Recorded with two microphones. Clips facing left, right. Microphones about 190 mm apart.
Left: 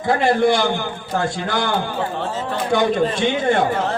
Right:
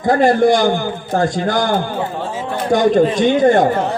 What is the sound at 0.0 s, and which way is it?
A man's voice, 45° right (ahead or behind).